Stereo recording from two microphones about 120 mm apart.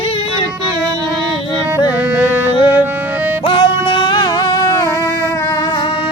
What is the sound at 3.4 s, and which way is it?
Music, 45° left (ahead or behind).